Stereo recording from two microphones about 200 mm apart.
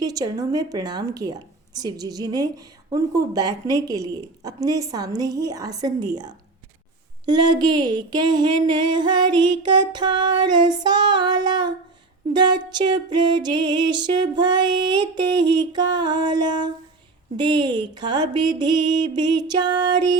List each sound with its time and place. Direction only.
0.0 s a woman's voice: 20° right (ahead or behind)